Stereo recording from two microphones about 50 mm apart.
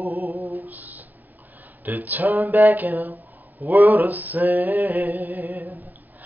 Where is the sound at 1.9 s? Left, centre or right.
Right.